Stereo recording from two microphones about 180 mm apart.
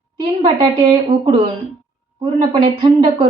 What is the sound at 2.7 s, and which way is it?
Speech, 30° right (ahead or behind).